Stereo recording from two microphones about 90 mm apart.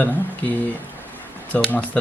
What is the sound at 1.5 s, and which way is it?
Speech, 15° left (ahead or behind).